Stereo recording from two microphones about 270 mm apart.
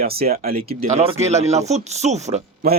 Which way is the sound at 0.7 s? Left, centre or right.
Right.